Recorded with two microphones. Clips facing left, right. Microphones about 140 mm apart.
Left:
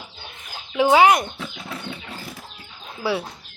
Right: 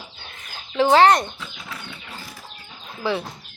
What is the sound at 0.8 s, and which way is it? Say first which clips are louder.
Speech: even; 10° left (ahead or behind).